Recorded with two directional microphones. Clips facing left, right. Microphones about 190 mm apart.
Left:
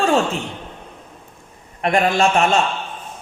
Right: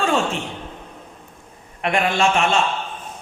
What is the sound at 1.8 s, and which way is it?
Speech, 40° left (ahead or behind).